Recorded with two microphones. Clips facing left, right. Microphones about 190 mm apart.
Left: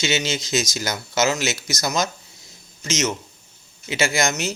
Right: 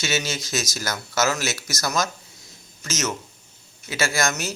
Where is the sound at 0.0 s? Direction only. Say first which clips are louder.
Left 3 dB; 20° left (ahead or behind).